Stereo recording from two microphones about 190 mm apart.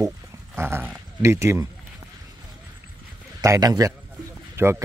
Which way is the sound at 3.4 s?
15° right (ahead or behind).